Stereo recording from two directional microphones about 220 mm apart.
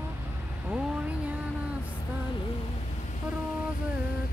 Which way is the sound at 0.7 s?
5° right (ahead or behind).